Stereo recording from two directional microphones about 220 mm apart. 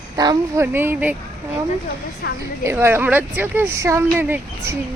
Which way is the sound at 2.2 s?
45° left (ahead or behind).